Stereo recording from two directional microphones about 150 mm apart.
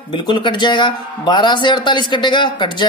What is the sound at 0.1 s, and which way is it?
A man's voice, 30° left (ahead or behind).